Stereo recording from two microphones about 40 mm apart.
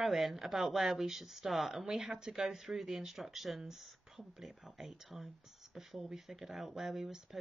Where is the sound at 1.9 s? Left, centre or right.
Centre.